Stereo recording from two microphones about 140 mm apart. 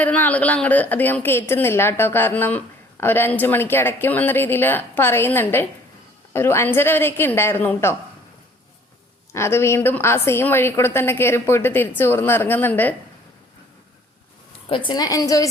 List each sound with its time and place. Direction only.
0.0 s a woman's voice: 10° left (ahead or behind)
9.3 s a woman's voice: 20° left (ahead or behind)
14.8 s a woman's voice: 30° left (ahead or behind)